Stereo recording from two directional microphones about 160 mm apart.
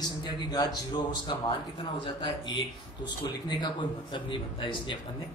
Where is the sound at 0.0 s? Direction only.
25° left (ahead or behind).